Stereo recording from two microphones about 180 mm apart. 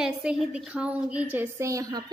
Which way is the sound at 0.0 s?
5° right (ahead or behind).